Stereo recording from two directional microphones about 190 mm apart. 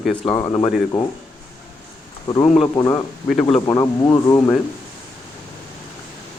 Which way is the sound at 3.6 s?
20° left (ahead or behind).